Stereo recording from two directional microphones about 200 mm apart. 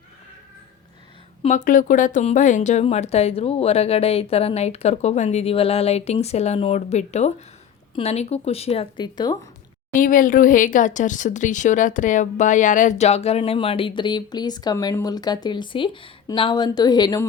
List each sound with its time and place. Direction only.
1.4 s speech: 40° left (ahead or behind); by 9.4 s 20° left (ahead or behind)
9.9 s speech: 40° left (ahead or behind); by 17.2 s 20° left (ahead or behind)